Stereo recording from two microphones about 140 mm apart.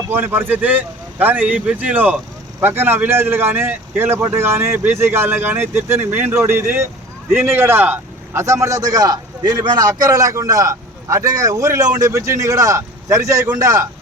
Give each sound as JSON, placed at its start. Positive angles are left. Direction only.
{"t": 0.1, "sound": "a man's voice", "side_deg": -15}